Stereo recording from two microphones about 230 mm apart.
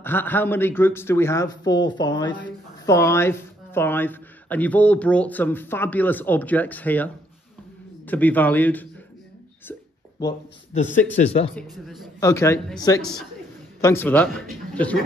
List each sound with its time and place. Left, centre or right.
0.0 s a woman's voice: centre
10.7 s a man's voice: left
11.5 s a man's voice: centre
12.2 s a woman's voice: centre